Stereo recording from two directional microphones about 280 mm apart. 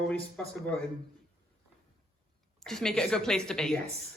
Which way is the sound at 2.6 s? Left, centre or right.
Centre.